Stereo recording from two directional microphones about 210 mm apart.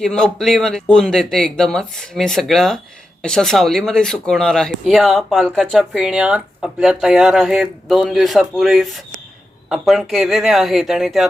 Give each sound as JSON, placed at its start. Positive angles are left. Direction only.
{"t": 0.0, "sound": "speech", "side_deg": 5}